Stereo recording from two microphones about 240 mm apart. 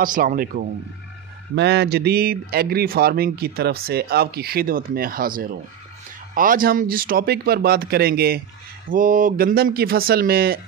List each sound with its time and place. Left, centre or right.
0.0 s speech: right